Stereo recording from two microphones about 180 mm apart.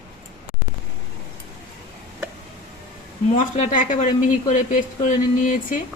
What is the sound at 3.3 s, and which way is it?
Speech, 40° left (ahead or behind).